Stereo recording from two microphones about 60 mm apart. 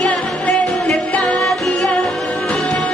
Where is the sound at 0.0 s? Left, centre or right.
Centre.